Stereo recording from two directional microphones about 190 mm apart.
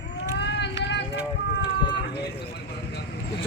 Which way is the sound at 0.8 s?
65° left (ahead or behind).